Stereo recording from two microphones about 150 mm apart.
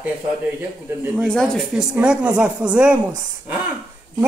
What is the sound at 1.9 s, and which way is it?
Speech, 5° right (ahead or behind).